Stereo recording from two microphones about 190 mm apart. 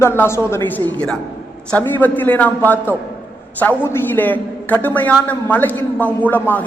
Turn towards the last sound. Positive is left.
turn(degrees=10)  # may be behind; listen again after turning